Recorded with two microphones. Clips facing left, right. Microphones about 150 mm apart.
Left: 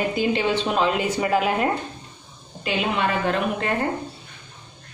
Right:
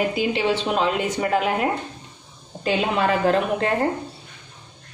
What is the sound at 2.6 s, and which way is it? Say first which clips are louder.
A woman's voice: right 2 dB; 35° right (ahead or behind).